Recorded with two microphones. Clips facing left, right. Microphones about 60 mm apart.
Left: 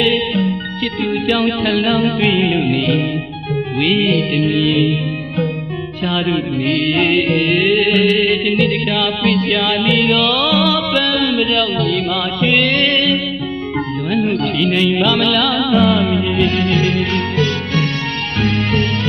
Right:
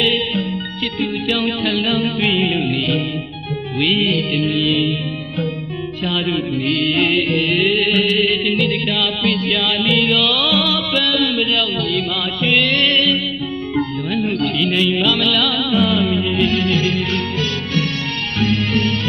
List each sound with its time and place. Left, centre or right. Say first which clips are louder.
0.0 s music: left 3 dB; left
6.1 s music: left 3 dB; left